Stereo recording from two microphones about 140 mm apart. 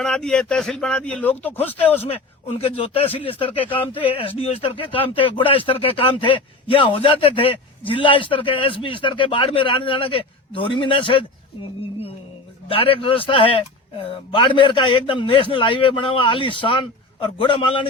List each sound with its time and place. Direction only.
0.0 s speech: 5° left (ahead or behind)
2.0 s a man's voice: 45° left (ahead or behind)
12.6 s a man's voice: 40° left (ahead or behind)